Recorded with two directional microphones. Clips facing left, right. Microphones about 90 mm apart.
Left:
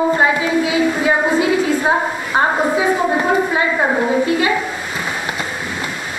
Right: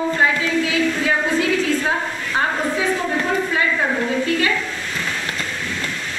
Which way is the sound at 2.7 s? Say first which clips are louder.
Left 5 dB; 15° left (ahead or behind).